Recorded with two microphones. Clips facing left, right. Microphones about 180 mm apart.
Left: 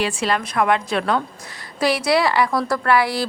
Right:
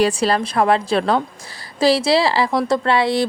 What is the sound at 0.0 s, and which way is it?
A woman's voice, 35° right (ahead or behind).